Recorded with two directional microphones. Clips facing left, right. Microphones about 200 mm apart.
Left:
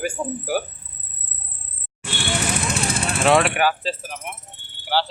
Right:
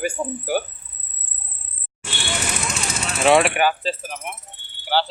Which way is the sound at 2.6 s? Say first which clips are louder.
Left 4 dB; 55° left (ahead or behind).